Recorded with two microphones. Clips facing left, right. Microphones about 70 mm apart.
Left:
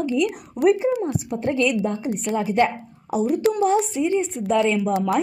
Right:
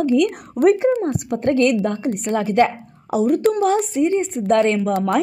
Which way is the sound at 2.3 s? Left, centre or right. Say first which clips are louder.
Right 3 dB; right.